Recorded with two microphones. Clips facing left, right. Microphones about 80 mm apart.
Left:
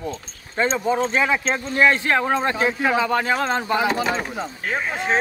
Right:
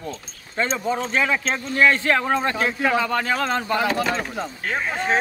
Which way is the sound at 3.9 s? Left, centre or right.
Centre.